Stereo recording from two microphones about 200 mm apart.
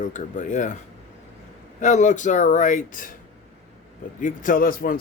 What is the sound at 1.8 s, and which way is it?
A man's voice, 40° left (ahead or behind).